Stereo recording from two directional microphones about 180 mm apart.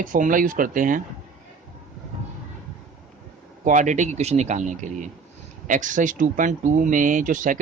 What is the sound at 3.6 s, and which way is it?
A man's voice, 45° right (ahead or behind).